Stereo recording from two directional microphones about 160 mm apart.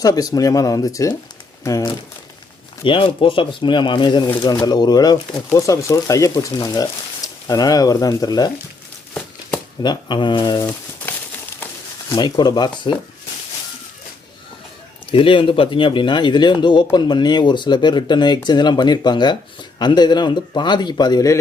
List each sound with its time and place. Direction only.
0.0 s speech: 20° left (ahead or behind)
2.8 s speech: 35° left (ahead or behind)
9.8 s speech: 30° left (ahead or behind)
10.6 s a sound: 10° left (ahead or behind)
11.6 s speech: 20° left (ahead or behind)
15.1 s speech: 35° left (ahead or behind)